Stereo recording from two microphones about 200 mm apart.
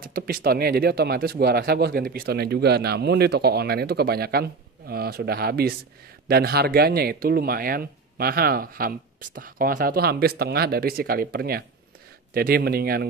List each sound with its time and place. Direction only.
0.0 s speech: 45° right (ahead or behind)